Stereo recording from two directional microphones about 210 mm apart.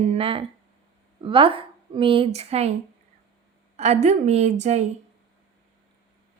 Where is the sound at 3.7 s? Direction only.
35° right (ahead or behind).